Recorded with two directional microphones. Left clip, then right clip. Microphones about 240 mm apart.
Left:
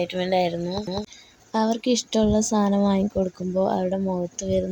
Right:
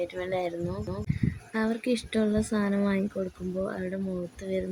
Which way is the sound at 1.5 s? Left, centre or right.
Centre.